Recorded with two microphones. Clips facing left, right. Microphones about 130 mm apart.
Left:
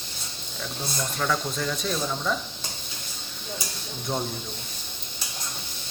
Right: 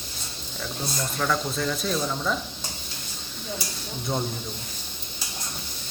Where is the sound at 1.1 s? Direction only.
Centre (ahead or behind).